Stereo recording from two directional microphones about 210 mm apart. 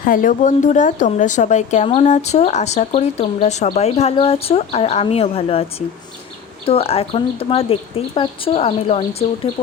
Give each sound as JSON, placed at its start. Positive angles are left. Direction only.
{"t": 0.0, "sound": "a woman's voice", "side_deg": 40}
{"t": 6.7, "sound": "speech", "side_deg": 30}